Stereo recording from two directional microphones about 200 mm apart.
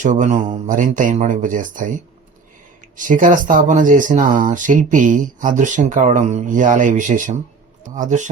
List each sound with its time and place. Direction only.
0.0 s speech: 40° right (ahead or behind)